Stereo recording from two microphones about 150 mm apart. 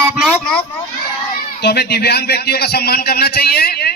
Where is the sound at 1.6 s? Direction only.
90° left.